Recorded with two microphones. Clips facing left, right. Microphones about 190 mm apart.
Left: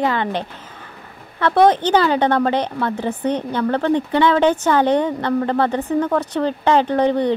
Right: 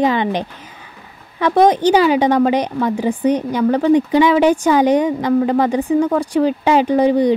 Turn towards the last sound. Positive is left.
turn(degrees=-10)  # may be behind; listen again after turning